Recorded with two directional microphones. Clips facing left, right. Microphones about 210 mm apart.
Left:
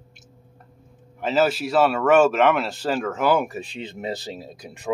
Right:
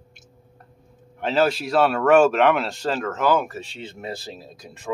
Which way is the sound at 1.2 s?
Centre (ahead or behind).